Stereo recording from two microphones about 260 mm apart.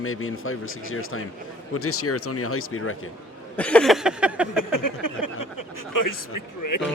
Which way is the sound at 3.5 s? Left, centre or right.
Centre.